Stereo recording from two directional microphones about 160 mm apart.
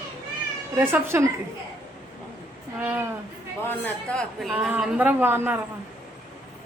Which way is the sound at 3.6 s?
10° left (ahead or behind).